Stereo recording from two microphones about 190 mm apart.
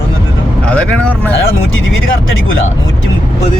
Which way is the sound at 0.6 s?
5° left (ahead or behind).